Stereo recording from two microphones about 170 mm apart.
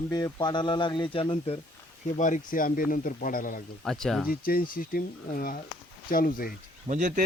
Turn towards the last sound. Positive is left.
turn(degrees=-45)  # may be behind; listen again after turning